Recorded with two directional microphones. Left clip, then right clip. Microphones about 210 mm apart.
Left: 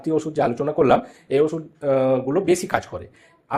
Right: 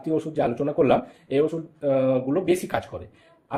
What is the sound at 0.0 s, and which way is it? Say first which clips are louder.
Speech: left 3 dB; 25° left (ahead or behind).